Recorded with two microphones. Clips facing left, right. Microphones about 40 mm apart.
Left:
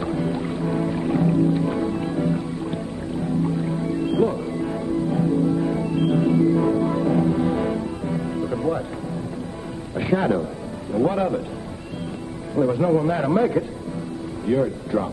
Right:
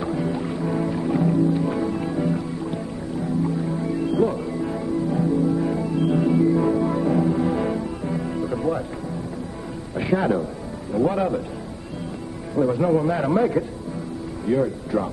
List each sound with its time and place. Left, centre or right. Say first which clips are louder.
0.0 s music: even; centre
3.7 s music: even; centre
4.0 s music: even; left
4.3 s music: even; centre
9.9 s a man's voice: even; centre
12.5 s a man's voice: even; centre